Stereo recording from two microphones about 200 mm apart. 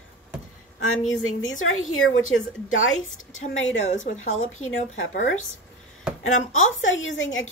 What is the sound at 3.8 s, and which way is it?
Speech, 40° left (ahead or behind).